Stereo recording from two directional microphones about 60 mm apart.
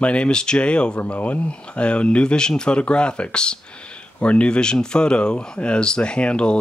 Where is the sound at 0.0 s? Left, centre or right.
Centre.